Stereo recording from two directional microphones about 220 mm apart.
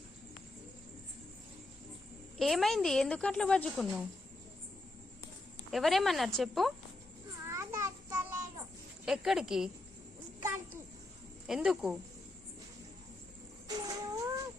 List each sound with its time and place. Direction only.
2.4 s speech: centre (ahead or behind)
5.7 s speech: centre (ahead or behind)
7.4 s children playing: 10° right (ahead or behind)
9.0 s speech: centre (ahead or behind)
11.4 s speech: centre (ahead or behind)
13.8 s a sound: 15° right (ahead or behind)